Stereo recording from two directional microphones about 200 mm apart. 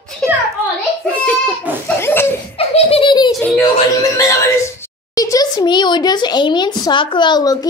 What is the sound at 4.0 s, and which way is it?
A child's voice, 15° left (ahead or behind).